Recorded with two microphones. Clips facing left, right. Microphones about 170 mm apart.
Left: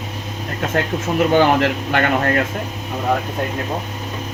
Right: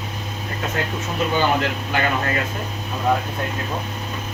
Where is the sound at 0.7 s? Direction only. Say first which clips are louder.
Left 8 dB; 70° left (ahead or behind).